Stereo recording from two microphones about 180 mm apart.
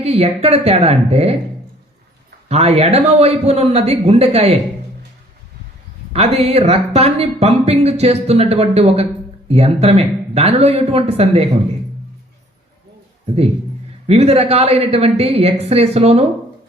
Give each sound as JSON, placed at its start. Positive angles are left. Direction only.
{"t": 0.0, "sound": "speech", "side_deg": -35}
{"t": 2.5, "sound": "speech", "side_deg": -35}
{"t": 6.1, "sound": "speech", "side_deg": -35}
{"t": 13.2, "sound": "speech", "side_deg": -35}